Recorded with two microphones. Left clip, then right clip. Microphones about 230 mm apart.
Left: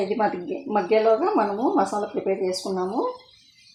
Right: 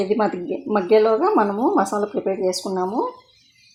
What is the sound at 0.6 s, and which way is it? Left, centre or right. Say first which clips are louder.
Speech: right 3 dB; right.